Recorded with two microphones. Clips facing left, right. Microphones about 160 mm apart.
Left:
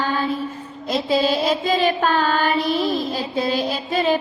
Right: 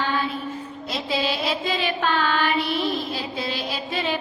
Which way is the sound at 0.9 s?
40° left (ahead or behind).